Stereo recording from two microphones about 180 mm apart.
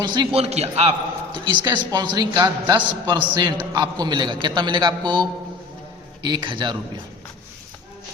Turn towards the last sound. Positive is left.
turn(degrees=-25)  # may be behind; listen again after turning